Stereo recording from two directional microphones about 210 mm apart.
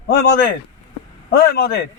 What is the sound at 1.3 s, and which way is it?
Speech, 50° left (ahead or behind).